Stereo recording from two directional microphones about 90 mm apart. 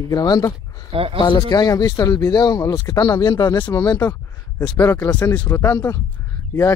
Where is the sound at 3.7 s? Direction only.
40° left (ahead or behind).